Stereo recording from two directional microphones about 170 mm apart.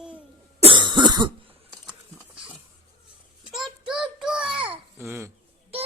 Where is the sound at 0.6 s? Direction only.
30° right (ahead or behind).